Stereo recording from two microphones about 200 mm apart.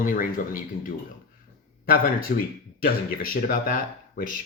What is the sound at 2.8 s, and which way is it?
Speech, 45° left (ahead or behind).